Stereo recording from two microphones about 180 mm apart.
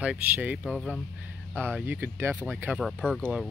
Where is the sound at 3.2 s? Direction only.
10° right (ahead or behind).